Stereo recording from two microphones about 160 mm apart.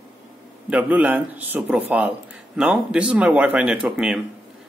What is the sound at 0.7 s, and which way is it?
Speech, 10° right (ahead or behind).